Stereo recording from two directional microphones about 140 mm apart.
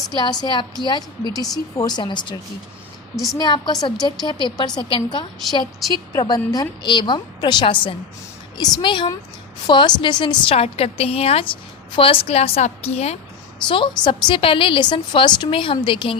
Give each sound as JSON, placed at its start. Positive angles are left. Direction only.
{"t": 0.1, "sound": "a woman's voice", "side_deg": 30}
{"t": 3.3, "sound": "a woman's voice", "side_deg": 30}
{"t": 13.7, "sound": "a woman's voice", "side_deg": 35}